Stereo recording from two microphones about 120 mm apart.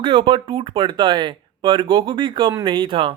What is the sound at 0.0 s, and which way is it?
Speech, 45° right (ahead or behind).